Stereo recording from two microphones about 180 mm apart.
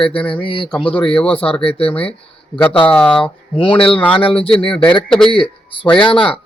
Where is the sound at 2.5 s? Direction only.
10° left (ahead or behind).